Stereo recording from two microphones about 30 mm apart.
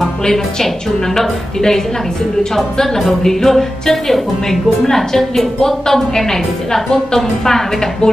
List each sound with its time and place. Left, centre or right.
0.2 s speech: centre